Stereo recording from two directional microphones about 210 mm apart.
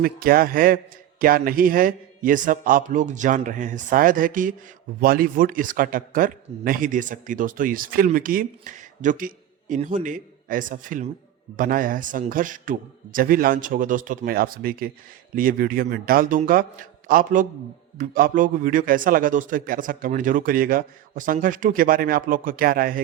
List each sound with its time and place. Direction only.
0.0 s a man's voice: 45° right (ahead or behind)